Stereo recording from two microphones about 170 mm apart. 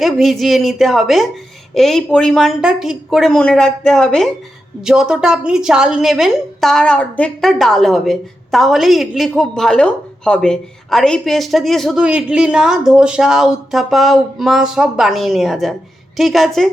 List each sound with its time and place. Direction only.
0.0 s a woman's voice: centre (ahead or behind)